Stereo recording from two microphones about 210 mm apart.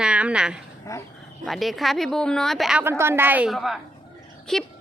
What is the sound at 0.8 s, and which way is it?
Dog, 15° left (ahead or behind).